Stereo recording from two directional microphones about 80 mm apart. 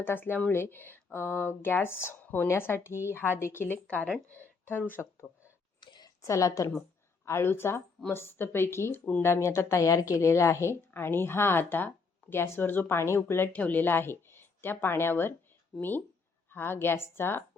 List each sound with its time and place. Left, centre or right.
0.0 s speech: left
5.8 s a sound: left
6.2 s a woman's voice: left
7.3 s a woman's voice: left